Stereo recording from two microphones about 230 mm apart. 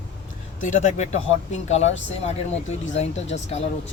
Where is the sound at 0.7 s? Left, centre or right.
Left.